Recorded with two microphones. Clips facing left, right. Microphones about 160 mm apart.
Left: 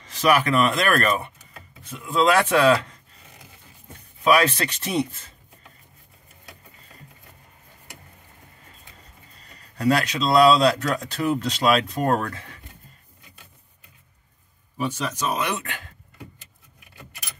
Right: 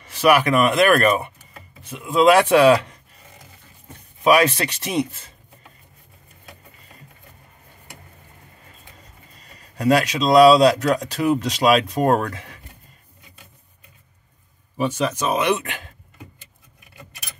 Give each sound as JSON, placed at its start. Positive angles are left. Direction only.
{"t": 0.2, "sound": "speech", "side_deg": -10}
{"t": 4.2, "sound": "speech", "side_deg": -15}
{"t": 9.8, "sound": "speech", "side_deg": -15}
{"t": 14.8, "sound": "speech", "side_deg": -15}